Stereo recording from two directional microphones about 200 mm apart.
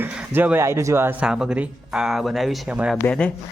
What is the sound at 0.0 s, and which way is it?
Speech, 10° right (ahead or behind).